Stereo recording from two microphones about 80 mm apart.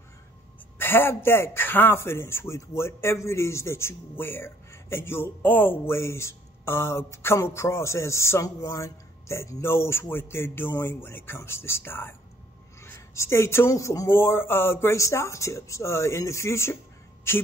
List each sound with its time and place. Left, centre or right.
0.7 s a man's voice: left